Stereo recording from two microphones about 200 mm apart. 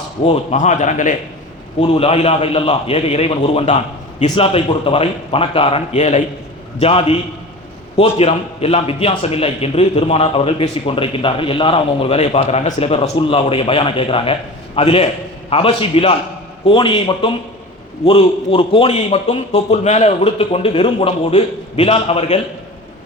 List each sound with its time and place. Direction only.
0.3 s a man's voice: 35° left (ahead or behind)
1.8 s a man's voice: 30° left (ahead or behind)